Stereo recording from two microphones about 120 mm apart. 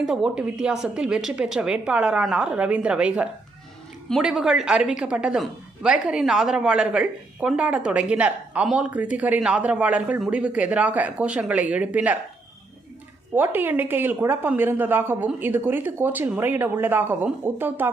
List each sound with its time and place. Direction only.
0.0 s a woman's voice: 5° right (ahead or behind)
13.3 s a woman's voice: 15° right (ahead or behind)